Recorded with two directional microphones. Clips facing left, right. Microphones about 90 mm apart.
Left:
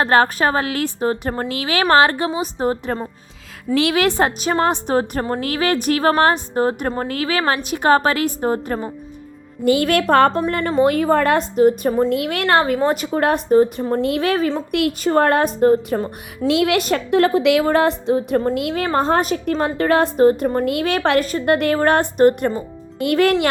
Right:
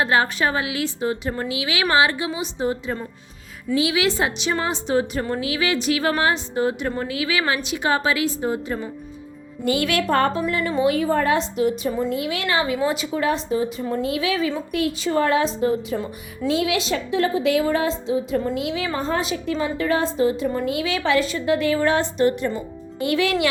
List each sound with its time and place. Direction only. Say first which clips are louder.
0.0 s a woman's voice: left 4 dB; 50° left (ahead or behind)
11.5 s a woman's voice: left 7 dB; 50° left (ahead or behind)
12.1 s a woman's voice: left 6 dB; 60° left (ahead or behind)
14.7 s a woman's voice: left 4 dB; 65° left (ahead or behind)
16.5 s a woman's voice: left 5 dB; 70° left (ahead or behind)
18.7 s a woman's voice: left 4 dB; 45° left (ahead or behind)
18.9 s a woman's voice: left 6 dB; 65° left (ahead or behind); by 23.5 s 50° left (ahead or behind)